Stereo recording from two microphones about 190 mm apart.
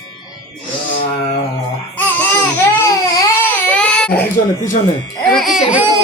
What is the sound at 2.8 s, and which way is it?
Baby cry, 20° left (ahead or behind).